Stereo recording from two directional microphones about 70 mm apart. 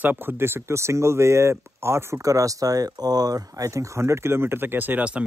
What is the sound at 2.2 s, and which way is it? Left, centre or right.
Speech, right.